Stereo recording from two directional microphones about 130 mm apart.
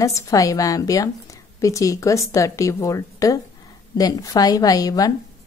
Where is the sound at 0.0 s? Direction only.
25° left (ahead or behind).